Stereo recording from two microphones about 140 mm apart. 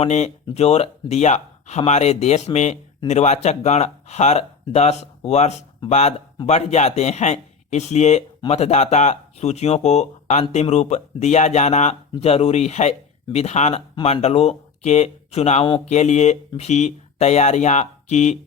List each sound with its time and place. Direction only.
0.0 s speech: 55° left (ahead or behind)